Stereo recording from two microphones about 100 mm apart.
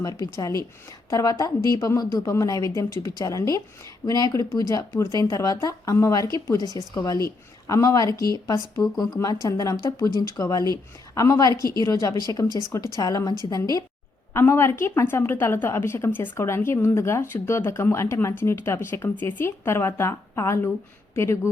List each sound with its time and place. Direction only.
0.0 s a woman's voice: 35° left (ahead or behind)
14.3 s a woman's voice: 25° left (ahead or behind)